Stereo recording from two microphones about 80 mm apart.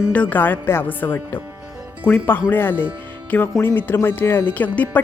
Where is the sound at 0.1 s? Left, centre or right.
Centre.